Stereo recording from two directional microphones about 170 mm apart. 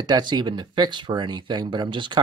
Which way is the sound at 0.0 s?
25° right (ahead or behind).